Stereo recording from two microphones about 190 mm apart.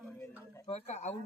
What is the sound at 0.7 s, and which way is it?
Speech, 35° left (ahead or behind).